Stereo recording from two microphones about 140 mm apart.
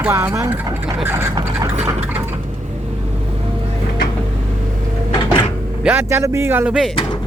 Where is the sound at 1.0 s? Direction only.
20° right (ahead or behind).